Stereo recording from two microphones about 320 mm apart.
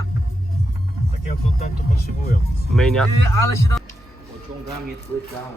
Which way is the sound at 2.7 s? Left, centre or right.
Centre.